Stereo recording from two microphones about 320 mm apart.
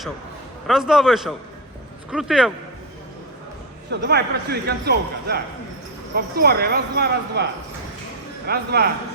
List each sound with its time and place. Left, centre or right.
0.7 s a man's voice: centre
4.0 s speech: right
8.4 s speech: right